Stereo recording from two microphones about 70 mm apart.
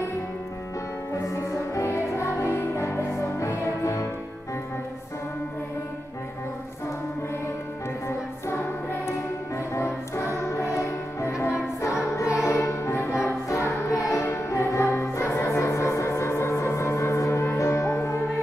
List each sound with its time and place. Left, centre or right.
1.1 s music: left
9.8 s music: left